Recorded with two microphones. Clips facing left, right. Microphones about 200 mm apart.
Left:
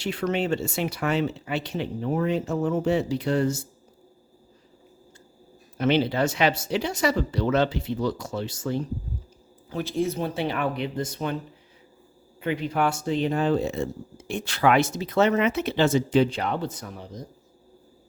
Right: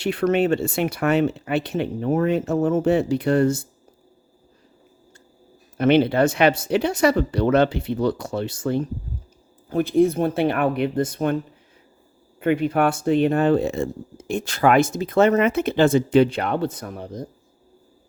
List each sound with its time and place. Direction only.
0.0 s speech: 55° right (ahead or behind)
5.7 s speech: 55° right (ahead or behind)
12.4 s speech: 55° right (ahead or behind)